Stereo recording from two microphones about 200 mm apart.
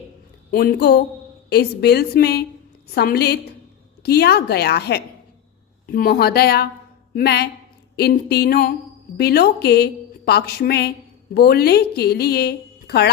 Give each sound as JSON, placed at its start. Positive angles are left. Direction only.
{"t": 0.5, "sound": "a woman's voice", "side_deg": 50}